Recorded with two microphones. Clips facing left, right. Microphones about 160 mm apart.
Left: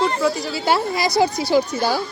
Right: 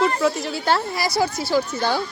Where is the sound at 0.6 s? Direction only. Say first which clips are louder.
Left 3 dB; 15° left (ahead or behind).